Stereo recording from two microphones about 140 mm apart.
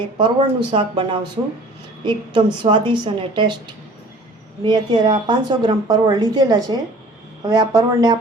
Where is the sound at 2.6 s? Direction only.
35° right (ahead or behind).